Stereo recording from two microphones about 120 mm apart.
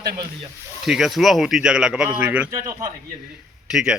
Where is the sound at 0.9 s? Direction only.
Centre (ahead or behind).